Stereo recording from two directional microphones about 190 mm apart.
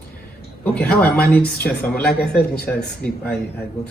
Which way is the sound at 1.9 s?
55° left (ahead or behind).